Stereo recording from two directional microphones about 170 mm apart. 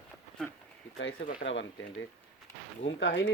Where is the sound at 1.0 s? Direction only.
60° left (ahead or behind).